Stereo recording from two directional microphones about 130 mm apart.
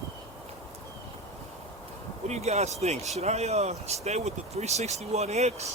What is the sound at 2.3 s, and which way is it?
Speech, 55° right (ahead or behind).